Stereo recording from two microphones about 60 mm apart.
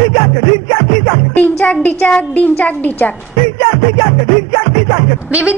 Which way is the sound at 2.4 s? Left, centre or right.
Left.